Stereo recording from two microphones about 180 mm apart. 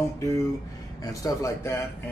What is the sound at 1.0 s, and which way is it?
Speech, 20° left (ahead or behind).